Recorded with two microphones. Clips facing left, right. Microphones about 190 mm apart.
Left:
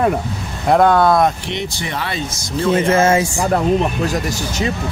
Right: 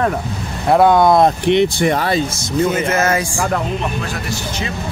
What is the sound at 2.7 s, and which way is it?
Music, 30° left (ahead or behind).